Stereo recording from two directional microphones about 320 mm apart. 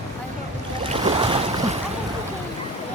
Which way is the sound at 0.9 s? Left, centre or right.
Centre.